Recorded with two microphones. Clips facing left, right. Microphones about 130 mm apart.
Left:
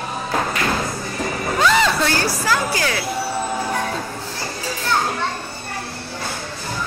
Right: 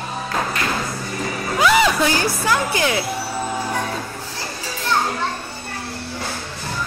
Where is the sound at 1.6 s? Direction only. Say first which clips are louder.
Right 2 dB; 10° right (ahead or behind).